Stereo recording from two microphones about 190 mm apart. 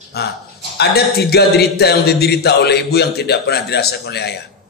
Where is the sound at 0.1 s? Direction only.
55° left (ahead or behind).